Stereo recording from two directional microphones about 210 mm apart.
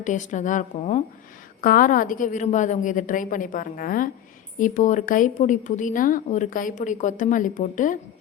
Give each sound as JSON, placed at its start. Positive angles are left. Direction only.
{"t": 0.0, "sound": "a woman's voice", "side_deg": 35}